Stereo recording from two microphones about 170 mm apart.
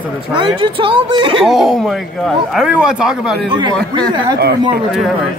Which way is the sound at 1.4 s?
Centre (ahead or behind).